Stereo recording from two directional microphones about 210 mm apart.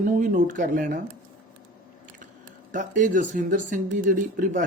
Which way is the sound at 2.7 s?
40° right (ahead or behind).